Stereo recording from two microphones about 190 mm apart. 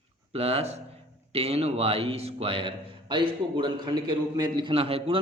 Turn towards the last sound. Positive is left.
turn(degrees=-30)  # may be behind; listen again after turning